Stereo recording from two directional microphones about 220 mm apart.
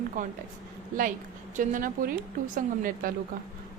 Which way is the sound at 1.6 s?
40° right (ahead or behind).